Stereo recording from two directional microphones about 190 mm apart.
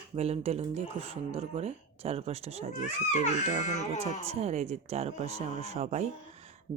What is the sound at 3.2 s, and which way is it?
Speech, 35° left (ahead or behind).